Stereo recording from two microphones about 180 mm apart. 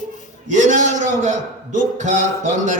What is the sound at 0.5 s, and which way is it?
Speech, 45° right (ahead or behind).